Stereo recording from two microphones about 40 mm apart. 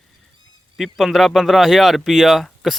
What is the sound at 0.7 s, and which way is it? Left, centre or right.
Speech, centre.